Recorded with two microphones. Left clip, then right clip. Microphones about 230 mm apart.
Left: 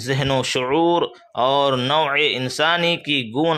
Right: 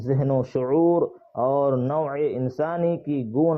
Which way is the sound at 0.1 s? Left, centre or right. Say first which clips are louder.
Left 3 dB; left.